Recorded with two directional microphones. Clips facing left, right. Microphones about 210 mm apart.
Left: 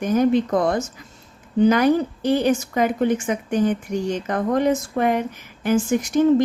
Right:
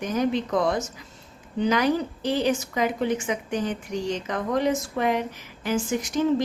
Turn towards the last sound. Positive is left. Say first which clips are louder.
# left 6 dB
turn(degrees=55)  # may be behind; listen again after turning